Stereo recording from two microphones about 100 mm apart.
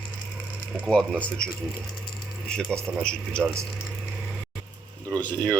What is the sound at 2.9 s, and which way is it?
Speech, 10° right (ahead or behind).